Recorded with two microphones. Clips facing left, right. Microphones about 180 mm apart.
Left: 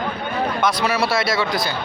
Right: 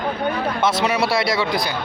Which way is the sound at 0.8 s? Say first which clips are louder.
Right 1 dB; 20° right (ahead or behind).